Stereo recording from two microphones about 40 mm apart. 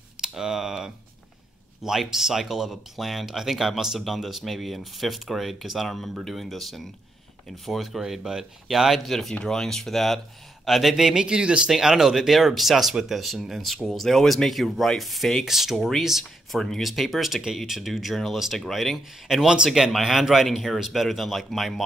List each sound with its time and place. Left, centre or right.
0.2 s speech: centre
8.0 s speech: centre
9.3 s speech: centre
11.2 s speech: right
11.7 s speech: centre
19.4 s speech: centre
19.7 s speech: centre